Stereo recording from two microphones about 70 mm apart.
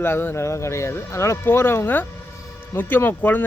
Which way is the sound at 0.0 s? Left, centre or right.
Left.